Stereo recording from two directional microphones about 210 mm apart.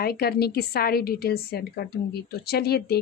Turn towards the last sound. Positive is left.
turn(degrees=50)  # may be behind; listen again after turning